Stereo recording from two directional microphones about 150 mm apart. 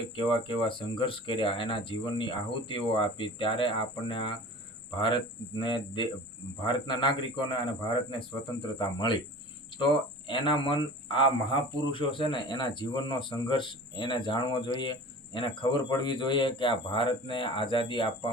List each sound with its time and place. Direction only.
0.2 s speech: 35° left (ahead or behind)